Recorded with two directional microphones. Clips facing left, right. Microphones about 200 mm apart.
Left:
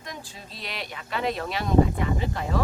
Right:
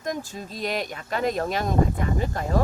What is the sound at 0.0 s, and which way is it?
Speech, 45° right (ahead or behind).